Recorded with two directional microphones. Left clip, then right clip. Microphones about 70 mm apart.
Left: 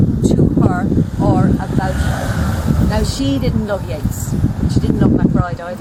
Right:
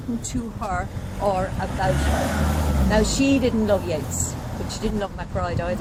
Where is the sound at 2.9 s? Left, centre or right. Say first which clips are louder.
Right 4 dB; centre.